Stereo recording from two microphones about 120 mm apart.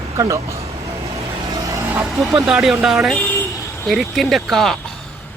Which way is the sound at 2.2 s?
5° right (ahead or behind).